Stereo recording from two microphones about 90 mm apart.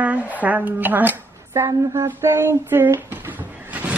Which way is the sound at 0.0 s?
15° right (ahead or behind).